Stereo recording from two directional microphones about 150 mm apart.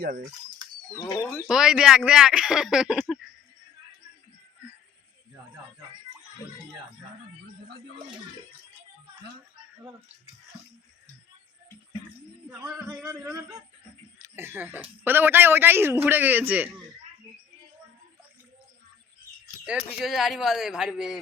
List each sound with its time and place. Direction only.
0.0 s speech: 90° right
1.5 s speech: 5° right (ahead or behind)
14.2 s speech: 15° right (ahead or behind)
20.0 s speech: centre (ahead or behind)